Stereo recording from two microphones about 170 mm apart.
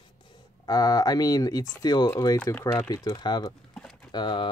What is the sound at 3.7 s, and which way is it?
Typing, centre (ahead or behind).